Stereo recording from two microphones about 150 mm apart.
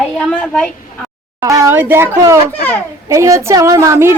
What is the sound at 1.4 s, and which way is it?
A woman's voice, 20° right (ahead or behind).